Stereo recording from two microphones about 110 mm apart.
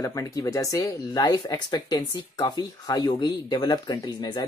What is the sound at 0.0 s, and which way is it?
Speech, 30° left (ahead or behind).